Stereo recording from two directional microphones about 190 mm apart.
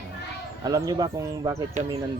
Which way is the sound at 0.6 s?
20° right (ahead or behind).